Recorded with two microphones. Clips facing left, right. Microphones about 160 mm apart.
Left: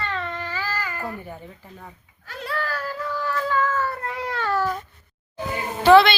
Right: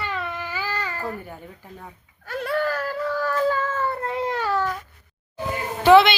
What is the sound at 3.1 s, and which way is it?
Child singing, 45° right (ahead or behind).